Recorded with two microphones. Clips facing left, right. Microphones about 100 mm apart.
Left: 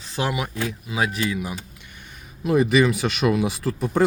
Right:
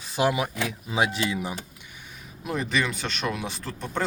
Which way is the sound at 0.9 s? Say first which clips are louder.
Even; 25° right (ahead or behind).